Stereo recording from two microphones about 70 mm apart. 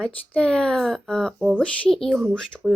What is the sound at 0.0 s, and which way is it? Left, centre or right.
Speech, centre.